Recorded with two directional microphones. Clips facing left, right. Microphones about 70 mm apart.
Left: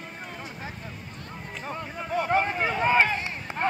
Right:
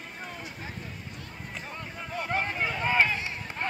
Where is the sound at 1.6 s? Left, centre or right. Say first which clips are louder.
Left 9 dB; left.